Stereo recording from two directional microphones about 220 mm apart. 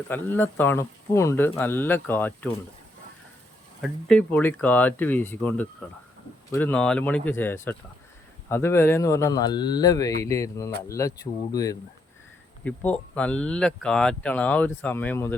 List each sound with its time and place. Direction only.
0.1 s speech: 10° left (ahead or behind)
3.8 s speech: centre (ahead or behind)